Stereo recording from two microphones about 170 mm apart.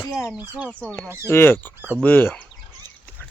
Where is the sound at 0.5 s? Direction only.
5° right (ahead or behind).